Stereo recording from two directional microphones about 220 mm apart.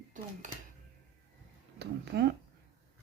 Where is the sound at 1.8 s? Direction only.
50° right (ahead or behind).